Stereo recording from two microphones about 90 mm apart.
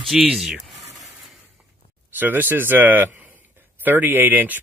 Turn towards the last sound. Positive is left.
turn(degrees=-20)  # may be behind; listen again after turning